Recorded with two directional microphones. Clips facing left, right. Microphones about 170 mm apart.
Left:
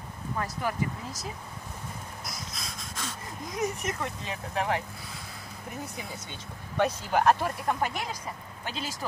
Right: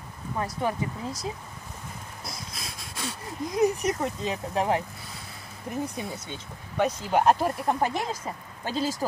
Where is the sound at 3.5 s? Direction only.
35° right (ahead or behind).